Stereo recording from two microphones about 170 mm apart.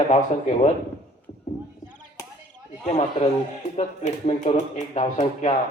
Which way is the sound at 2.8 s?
40° left (ahead or behind).